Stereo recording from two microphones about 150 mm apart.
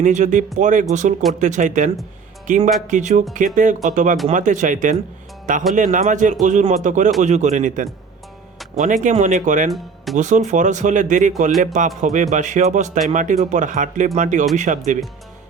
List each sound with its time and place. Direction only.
0.0 s speech: 55° right (ahead or behind)
9.6 s speech: centre (ahead or behind)
10.2 s speech: 55° right (ahead or behind)